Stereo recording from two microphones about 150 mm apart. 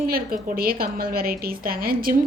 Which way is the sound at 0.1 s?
75° right (ahead or behind).